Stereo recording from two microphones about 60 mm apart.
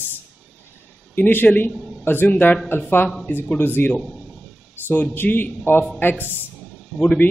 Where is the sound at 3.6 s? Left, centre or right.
Left.